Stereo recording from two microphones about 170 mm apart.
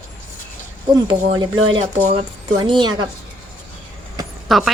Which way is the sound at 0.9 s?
25° right (ahead or behind).